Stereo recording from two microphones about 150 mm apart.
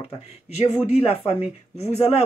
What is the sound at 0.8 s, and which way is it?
Speech, 45° left (ahead or behind).